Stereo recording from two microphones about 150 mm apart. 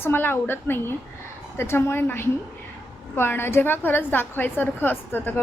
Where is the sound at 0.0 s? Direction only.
15° left (ahead or behind).